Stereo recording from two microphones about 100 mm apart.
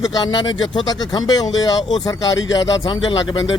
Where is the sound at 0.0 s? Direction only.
45° left (ahead or behind).